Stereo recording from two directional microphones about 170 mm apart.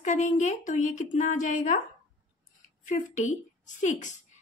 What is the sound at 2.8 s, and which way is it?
A woman's voice, 45° left (ahead or behind).